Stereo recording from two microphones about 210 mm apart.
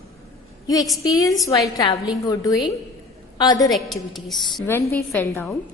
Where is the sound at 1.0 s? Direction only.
15° left (ahead or behind).